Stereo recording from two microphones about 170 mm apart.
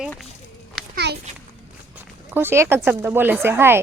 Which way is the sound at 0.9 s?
75° right (ahead or behind).